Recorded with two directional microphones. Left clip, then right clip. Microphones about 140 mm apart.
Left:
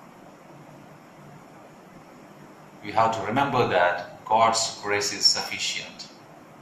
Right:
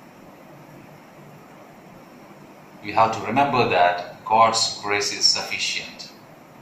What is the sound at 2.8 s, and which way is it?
A man's voice, 30° right (ahead or behind).